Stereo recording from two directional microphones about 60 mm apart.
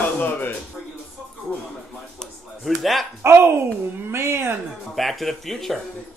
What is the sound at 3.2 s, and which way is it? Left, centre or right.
Speech, right.